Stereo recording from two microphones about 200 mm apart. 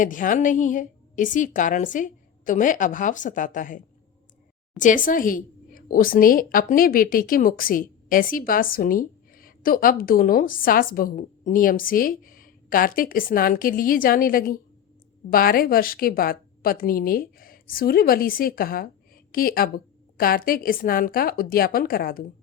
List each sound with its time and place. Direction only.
0.0 s a woman's voice: 40° left (ahead or behind)
4.8 s a woman's voice: 40° left (ahead or behind)